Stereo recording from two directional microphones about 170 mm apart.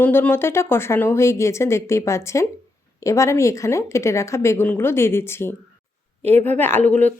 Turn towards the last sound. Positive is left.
turn(degrees=10)  # may be behind; listen again after turning